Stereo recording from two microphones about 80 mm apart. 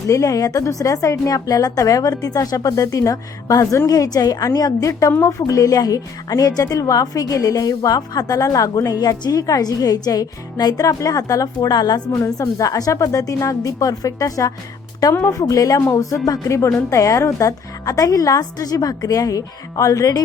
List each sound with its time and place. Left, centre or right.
0.1 s a woman's voice: left
12.2 s a woman's voice: left